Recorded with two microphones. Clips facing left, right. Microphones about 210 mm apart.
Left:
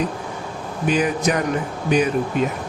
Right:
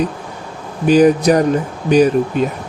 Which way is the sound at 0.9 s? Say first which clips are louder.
Right 10 dB; 35° right (ahead or behind).